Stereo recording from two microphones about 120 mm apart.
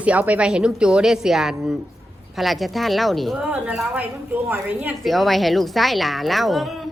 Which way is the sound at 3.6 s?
10° right (ahead or behind).